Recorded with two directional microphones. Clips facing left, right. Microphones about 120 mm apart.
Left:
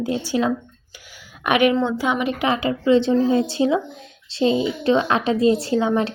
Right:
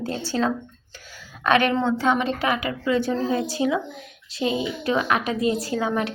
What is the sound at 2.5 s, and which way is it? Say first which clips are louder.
A woman's voice: left 10 dB; 25° left (ahead or behind).